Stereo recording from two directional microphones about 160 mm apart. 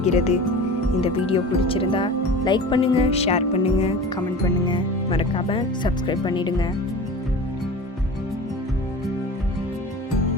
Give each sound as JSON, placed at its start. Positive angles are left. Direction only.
{"t": 0.0, "sound": "speech", "side_deg": 45}